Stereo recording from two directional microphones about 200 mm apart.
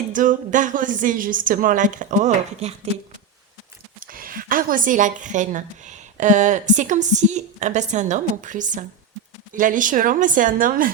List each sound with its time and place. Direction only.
0.1 s speech: 40° right (ahead or behind)
4.0 s speech: 45° right (ahead or behind)